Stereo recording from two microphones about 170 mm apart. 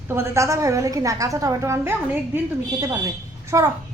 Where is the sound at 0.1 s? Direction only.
15° right (ahead or behind).